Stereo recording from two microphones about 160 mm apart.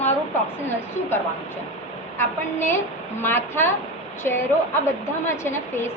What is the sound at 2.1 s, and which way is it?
A woman's voice, 15° left (ahead or behind).